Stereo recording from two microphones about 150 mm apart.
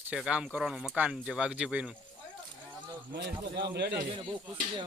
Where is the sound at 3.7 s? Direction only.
90° right.